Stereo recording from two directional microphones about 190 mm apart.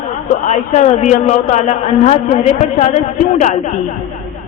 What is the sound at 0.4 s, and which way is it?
A man's voice, 40° left (ahead or behind).